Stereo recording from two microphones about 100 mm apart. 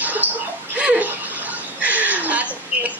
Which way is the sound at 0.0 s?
15° right (ahead or behind).